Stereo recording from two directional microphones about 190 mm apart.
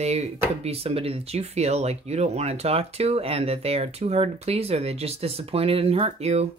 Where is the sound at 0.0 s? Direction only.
35° right (ahead or behind).